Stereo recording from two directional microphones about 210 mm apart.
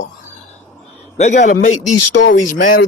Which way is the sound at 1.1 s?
35° left (ahead or behind).